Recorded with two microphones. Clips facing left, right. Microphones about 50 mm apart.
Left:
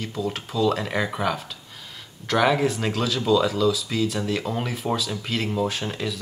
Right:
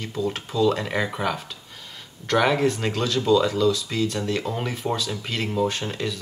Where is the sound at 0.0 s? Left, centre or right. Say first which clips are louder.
Right 1 dB; centre.